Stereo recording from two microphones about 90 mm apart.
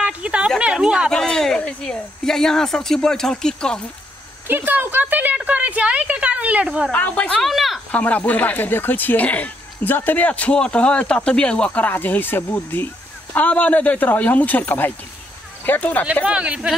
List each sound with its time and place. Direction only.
0.0 s a sound: 10° right (ahead or behind)
1.1 s speech: 5° left (ahead or behind)
4.5 s a woman's voice: 20° right (ahead or behind)
6.9 s speech: 15° left (ahead or behind)
7.4 s speech: centre (ahead or behind)
7.9 s speech: 15° left (ahead or behind)
16.3 s a woman's voice: 15° right (ahead or behind)